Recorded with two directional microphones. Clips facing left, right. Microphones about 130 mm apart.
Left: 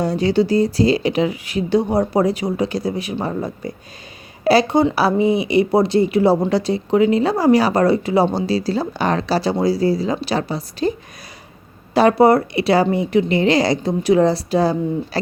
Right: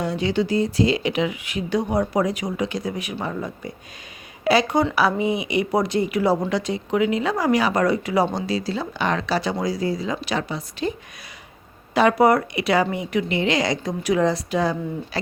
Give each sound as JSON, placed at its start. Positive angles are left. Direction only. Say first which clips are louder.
{"t": 0.0, "sound": "speech", "louder": "left 5 dB", "side_deg": 40}
{"t": 11.9, "sound": "speech", "louder": "left 4 dB", "side_deg": 35}